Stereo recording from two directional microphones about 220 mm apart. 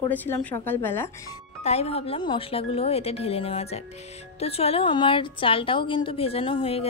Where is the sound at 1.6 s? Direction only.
30° left (ahead or behind).